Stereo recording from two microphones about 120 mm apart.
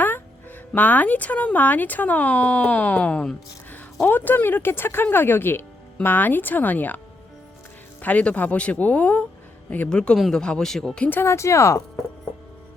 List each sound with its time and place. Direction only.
0.7 s speech: 15° left (ahead or behind)
8.0 s speech: 10° left (ahead or behind)